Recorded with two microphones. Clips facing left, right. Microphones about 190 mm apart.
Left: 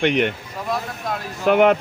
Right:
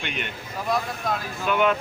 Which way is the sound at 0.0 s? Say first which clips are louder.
Left 14 dB; 70° left (ahead or behind).